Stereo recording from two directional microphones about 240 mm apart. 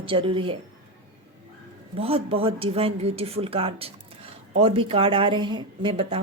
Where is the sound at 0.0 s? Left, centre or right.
Right.